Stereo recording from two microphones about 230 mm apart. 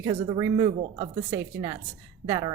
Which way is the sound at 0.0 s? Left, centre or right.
Centre.